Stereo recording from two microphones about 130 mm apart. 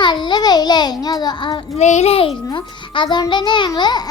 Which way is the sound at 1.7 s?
60° left (ahead or behind).